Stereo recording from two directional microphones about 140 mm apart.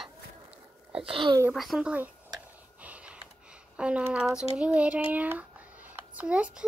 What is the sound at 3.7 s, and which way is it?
A child's voice, 10° right (ahead or behind).